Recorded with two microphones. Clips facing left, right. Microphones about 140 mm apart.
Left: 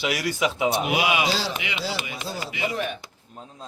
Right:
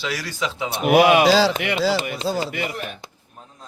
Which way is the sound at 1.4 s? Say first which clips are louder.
Right 11 dB; 90° right.